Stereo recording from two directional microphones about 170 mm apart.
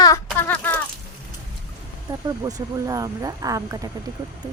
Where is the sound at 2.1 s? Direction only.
20° right (ahead or behind).